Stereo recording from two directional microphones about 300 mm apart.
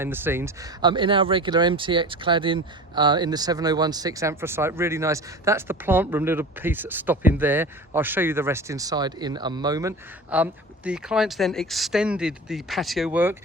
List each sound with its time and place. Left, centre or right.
0.0 s speech: centre